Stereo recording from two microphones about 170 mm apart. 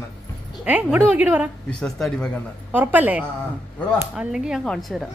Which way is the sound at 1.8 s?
5° left (ahead or behind).